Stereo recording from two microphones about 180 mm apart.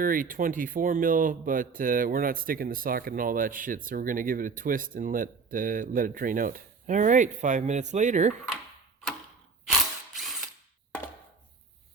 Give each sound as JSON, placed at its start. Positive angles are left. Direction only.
{"t": 0.0, "sound": "speech", "side_deg": -50}
{"t": 10.2, "sound": "ratchet", "side_deg": 0}